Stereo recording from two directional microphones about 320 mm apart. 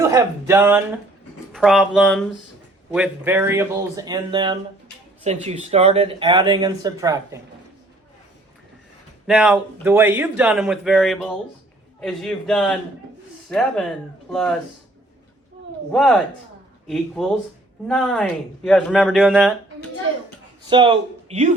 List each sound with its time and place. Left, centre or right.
0.0 s speech: centre
9.2 s speech: centre
15.9 s speech: centre
20.7 s speech: centre